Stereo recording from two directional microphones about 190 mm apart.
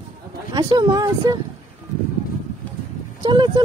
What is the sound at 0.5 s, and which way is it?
Speech, 20° right (ahead or behind).